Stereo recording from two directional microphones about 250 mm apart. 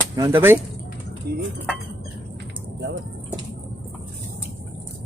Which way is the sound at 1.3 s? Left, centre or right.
Right.